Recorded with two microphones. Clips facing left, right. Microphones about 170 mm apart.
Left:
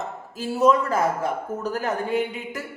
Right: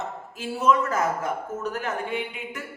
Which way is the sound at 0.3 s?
35° left (ahead or behind).